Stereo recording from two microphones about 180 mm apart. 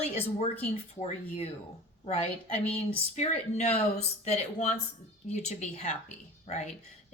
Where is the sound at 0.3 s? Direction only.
35° left (ahead or behind).